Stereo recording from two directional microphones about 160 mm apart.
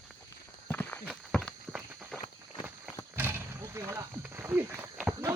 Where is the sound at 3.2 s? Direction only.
15° right (ahead or behind).